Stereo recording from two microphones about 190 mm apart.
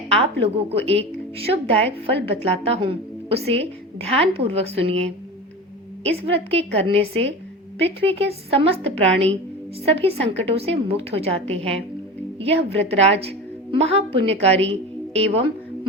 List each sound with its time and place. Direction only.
0.1 s a woman's voice: 30° right (ahead or behind)
12.4 s a woman's voice: 30° right (ahead or behind)